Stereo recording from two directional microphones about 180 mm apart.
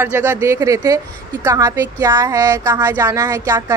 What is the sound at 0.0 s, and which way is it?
A woman's voice, 10° right (ahead or behind).